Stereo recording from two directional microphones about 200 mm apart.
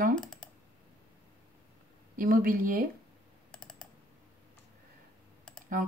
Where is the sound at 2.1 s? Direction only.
45° right (ahead or behind).